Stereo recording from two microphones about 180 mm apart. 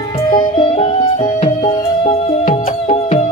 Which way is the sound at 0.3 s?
30° left (ahead or behind).